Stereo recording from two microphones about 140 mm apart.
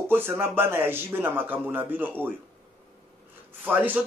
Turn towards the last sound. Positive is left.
turn(degrees=-10)  # may be behind; listen again after turning